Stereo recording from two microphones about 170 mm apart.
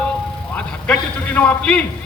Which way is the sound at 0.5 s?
5° left (ahead or behind).